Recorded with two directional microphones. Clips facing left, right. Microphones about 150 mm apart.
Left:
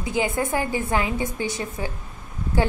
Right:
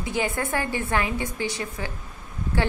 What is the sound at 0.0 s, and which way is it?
A woman's voice, 20° left (ahead or behind).